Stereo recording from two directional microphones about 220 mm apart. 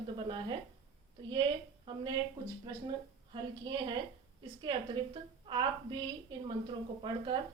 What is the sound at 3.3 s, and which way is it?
Speech, 20° right (ahead or behind).